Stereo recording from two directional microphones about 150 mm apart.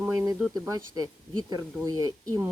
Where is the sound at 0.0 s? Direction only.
20° right (ahead or behind).